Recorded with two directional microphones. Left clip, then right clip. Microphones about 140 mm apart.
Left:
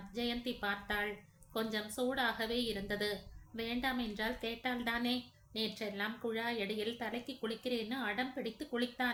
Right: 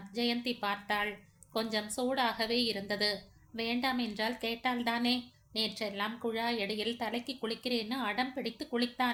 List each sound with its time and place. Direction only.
0.1 s a woman's voice: 20° right (ahead or behind)